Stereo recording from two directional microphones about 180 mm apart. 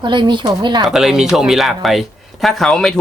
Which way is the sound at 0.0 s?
25° right (ahead or behind).